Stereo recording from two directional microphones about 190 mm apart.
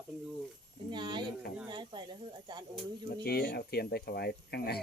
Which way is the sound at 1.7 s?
25° right (ahead or behind).